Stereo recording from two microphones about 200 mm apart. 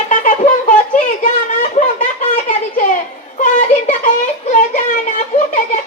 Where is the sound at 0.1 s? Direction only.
40° left (ahead or behind).